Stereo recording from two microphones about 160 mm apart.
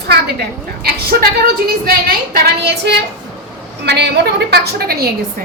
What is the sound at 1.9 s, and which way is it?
A woman's voice, 75° right (ahead or behind).